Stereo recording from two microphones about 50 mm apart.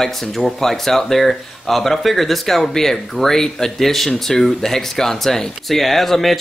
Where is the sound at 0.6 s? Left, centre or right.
Centre.